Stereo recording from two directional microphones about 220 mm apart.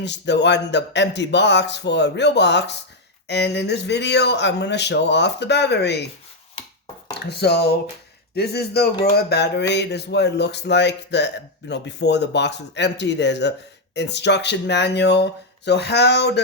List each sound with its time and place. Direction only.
0.0 s speech: 50° left (ahead or behind)
7.1 s speech: 45° left (ahead or behind)